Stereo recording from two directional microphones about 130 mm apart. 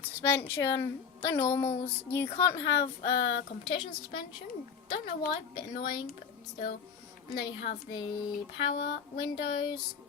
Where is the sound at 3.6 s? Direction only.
40° left (ahead or behind).